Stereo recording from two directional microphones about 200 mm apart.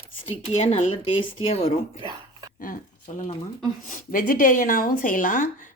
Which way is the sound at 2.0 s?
20° right (ahead or behind).